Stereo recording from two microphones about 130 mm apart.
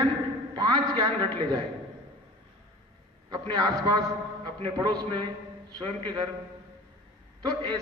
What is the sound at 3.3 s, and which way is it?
A man's voice, 30° right (ahead or behind).